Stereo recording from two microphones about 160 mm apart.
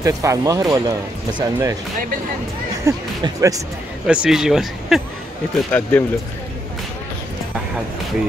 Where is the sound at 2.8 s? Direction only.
20° right (ahead or behind).